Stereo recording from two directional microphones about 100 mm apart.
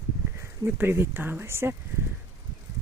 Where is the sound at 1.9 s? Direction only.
30° right (ahead or behind).